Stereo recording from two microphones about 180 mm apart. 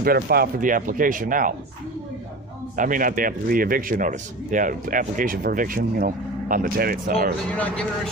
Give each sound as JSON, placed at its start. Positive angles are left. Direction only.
{"t": 0.0, "sound": "a man's voice", "side_deg": -55}
{"t": 2.7, "sound": "a man's voice", "side_deg": -50}
{"t": 7.5, "sound": "speech", "side_deg": 5}